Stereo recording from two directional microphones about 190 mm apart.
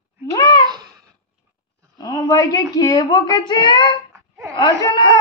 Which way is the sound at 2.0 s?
20° left (ahead or behind).